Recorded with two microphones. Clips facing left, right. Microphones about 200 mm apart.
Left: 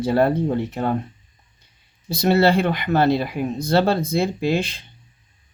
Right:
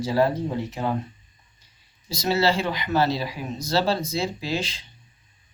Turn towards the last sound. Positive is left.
turn(degrees=55)  # may be behind; listen again after turning